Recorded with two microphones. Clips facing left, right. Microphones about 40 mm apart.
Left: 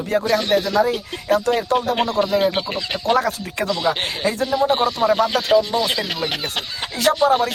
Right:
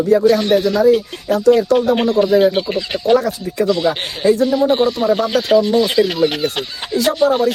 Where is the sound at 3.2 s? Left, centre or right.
Left.